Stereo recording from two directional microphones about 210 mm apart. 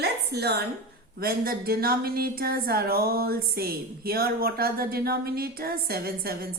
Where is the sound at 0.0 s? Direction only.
50° right (ahead or behind).